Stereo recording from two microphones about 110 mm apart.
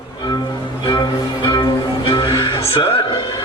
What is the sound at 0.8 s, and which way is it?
Music, 45° left (ahead or behind).